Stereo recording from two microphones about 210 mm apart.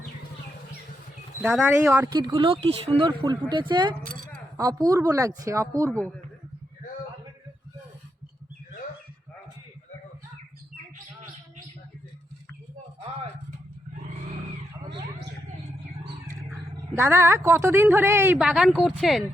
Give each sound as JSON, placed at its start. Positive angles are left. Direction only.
{"t": 1.4, "sound": "speech", "side_deg": -10}
{"t": 2.1, "sound": "speech", "side_deg": -20}
{"t": 5.9, "sound": "a man's voice", "side_deg": 5}
{"t": 16.3, "sound": "speech", "side_deg": -15}